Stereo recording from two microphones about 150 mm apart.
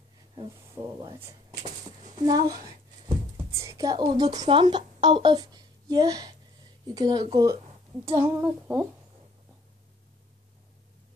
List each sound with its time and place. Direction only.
0.8 s speech: 20° right (ahead or behind)
2.2 s speech: 25° right (ahead or behind)
8.0 s child singing: 15° right (ahead or behind)